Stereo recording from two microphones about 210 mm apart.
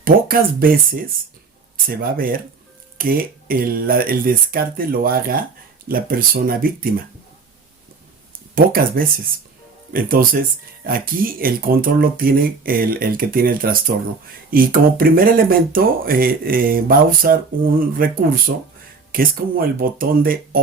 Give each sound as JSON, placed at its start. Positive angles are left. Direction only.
{"t": 0.0, "sound": "speech", "side_deg": -45}
{"t": 8.5, "sound": "speech", "side_deg": -45}